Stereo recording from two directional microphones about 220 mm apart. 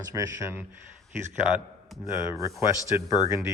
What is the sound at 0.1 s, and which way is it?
Speech, 15° right (ahead or behind).